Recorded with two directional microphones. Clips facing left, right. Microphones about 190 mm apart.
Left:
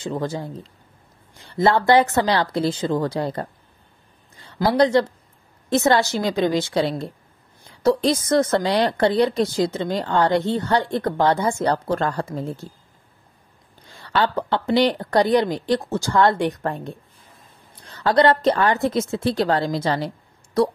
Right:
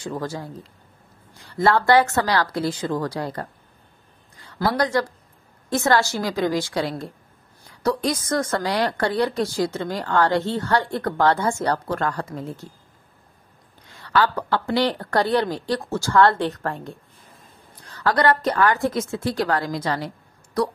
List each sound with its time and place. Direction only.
0.0 s a woman's voice: 20° left (ahead or behind)
1.5 s a woman's voice: 20° left (ahead or behind)
13.9 s a woman's voice: 25° left (ahead or behind)